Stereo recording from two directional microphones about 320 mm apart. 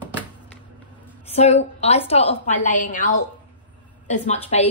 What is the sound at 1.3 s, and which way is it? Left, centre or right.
A woman's voice, centre.